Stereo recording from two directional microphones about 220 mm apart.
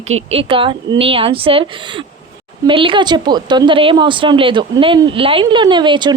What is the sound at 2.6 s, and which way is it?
Speech, 25° right (ahead or behind).